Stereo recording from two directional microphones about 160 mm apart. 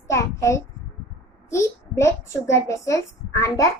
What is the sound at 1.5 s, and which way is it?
A child's voice, 20° left (ahead or behind).